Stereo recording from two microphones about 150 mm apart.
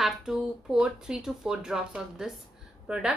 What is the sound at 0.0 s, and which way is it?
A woman's voice, 5° right (ahead or behind).